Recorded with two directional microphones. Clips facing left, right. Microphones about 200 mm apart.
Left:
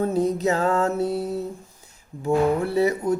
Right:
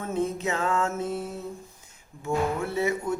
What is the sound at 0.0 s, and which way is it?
Speech, 35° left (ahead or behind).